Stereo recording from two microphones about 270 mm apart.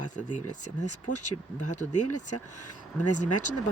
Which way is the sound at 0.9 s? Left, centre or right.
Left.